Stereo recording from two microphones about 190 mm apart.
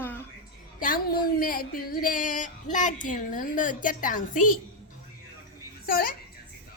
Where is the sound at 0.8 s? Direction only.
50° left (ahead or behind).